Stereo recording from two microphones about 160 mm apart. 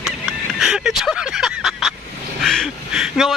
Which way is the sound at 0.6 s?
5° right (ahead or behind).